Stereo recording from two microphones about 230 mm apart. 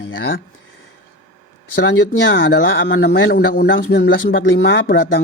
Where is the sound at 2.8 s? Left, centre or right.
Left.